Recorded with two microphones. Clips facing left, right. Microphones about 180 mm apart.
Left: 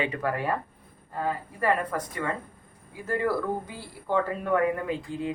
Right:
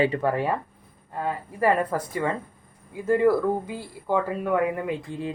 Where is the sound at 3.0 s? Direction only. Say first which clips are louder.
Right 7 dB; 20° right (ahead or behind).